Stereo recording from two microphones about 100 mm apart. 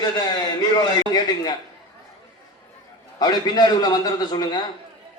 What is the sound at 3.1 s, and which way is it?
A man's voice, 40° left (ahead or behind).